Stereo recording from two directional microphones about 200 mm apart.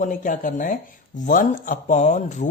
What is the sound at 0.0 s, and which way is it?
Speech, 40° left (ahead or behind).